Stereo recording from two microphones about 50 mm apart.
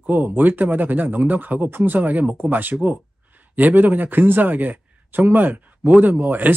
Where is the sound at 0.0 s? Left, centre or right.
Right.